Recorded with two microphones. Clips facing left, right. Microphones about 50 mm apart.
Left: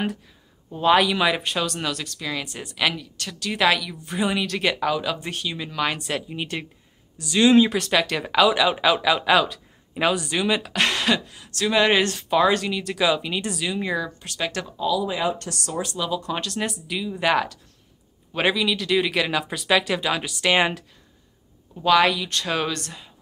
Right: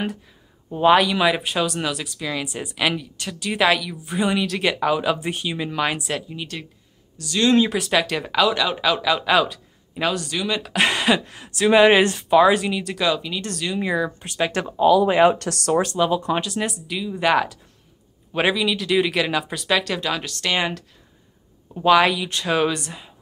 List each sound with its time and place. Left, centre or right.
0.7 s speech: centre
0.9 s speech: centre
6.2 s a woman's voice: left
7.5 s speech: centre
10.8 s speech: centre
13.7 s speech: centre
14.0 s speech: centre
14.8 s speech: right
15.3 s speech: right
16.0 s speech: right
16.3 s speech: centre
21.7 s speech: centre